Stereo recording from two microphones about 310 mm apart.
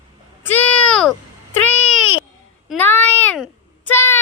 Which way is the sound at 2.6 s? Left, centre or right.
Centre.